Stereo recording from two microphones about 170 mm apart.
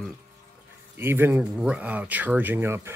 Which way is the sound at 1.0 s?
15° right (ahead or behind).